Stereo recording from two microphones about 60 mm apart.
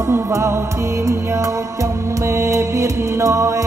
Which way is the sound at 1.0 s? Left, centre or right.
Right.